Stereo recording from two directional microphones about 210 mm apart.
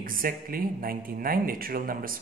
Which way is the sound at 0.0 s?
45° right (ahead or behind).